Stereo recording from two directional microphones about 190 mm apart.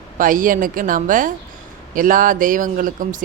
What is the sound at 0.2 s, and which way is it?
A woman's voice, 45° right (ahead or behind).